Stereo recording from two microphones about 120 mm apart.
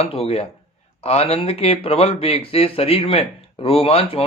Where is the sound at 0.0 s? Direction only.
55° left (ahead or behind).